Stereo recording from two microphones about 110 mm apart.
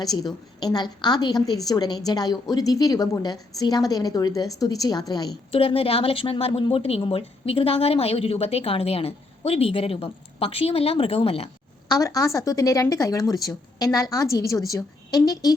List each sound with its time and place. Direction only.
0.0 s a woman's voice: 35° left (ahead or behind)
5.5 s speech: 60° left (ahead or behind)
11.9 s a woman's voice: 35° left (ahead or behind)